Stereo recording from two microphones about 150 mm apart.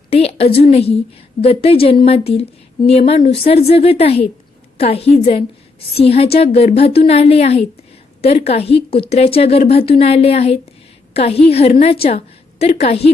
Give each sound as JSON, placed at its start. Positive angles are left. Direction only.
{"t": 0.1, "sound": "a woman's voice", "side_deg": 40}